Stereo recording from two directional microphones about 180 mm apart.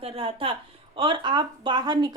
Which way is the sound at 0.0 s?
30° right (ahead or behind).